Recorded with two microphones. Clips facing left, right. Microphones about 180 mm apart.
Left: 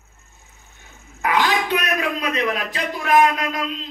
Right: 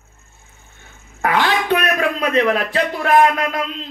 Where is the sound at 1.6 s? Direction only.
55° right (ahead or behind).